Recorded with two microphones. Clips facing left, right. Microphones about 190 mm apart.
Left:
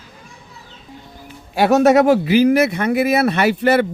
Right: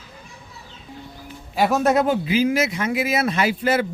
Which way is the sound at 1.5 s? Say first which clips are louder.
Left 6 dB; 80° left.